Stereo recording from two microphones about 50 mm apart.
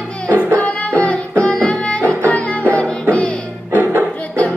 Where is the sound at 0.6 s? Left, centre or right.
Left.